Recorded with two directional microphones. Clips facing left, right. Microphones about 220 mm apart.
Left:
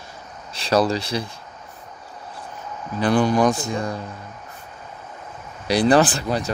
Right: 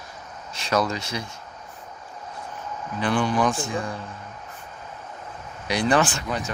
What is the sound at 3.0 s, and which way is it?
Speech, 40° left (ahead or behind).